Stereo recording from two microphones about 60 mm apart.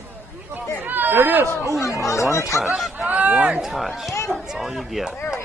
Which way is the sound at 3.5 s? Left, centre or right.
Centre.